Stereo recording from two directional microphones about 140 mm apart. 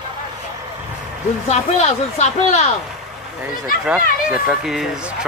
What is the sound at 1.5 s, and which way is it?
Speech, 50° left (ahead or behind).